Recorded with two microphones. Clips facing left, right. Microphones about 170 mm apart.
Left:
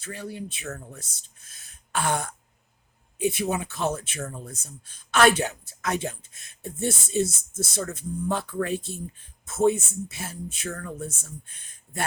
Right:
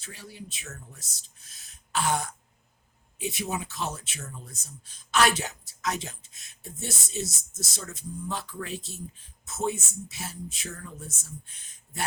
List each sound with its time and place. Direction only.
0.0 s speech: 55° left (ahead or behind)